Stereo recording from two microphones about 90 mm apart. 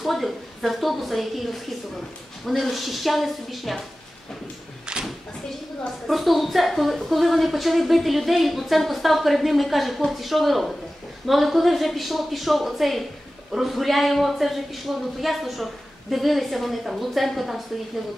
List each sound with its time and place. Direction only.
0.0 s a woman's voice: centre (ahead or behind)
4.8 s a woman's voice: 10° right (ahead or behind)